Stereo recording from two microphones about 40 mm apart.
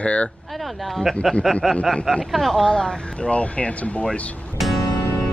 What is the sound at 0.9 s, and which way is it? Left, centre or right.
Speech, centre.